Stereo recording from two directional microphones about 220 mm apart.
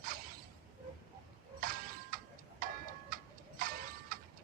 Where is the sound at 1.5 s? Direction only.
40° right (ahead or behind).